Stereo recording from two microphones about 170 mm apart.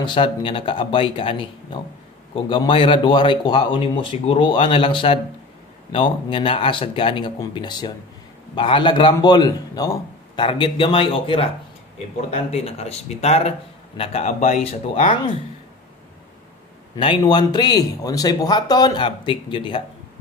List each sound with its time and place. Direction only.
0.0 s a man's voice: 30° left (ahead or behind)
16.9 s speech: 25° left (ahead or behind)